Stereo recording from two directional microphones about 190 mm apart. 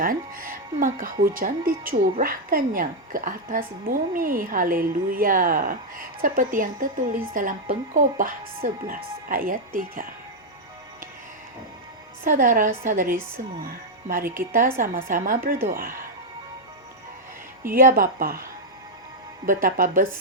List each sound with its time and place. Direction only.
0.0 s speech: 50° right (ahead or behind)
12.2 s speech: 45° right (ahead or behind)
17.6 s speech: 45° right (ahead or behind)
19.5 s speech: 45° right (ahead or behind)